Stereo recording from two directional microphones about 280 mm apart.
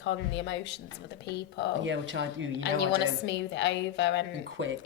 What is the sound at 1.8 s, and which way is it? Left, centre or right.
Speech, right.